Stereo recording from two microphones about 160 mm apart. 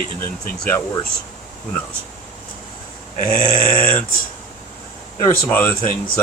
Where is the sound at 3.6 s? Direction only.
60° left (ahead or behind).